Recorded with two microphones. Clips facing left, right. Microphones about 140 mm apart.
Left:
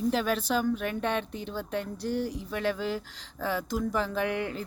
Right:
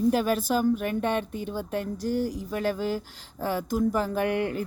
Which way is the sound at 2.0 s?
45° right (ahead or behind).